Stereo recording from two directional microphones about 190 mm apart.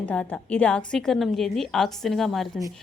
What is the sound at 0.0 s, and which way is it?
Speech, 10° left (ahead or behind).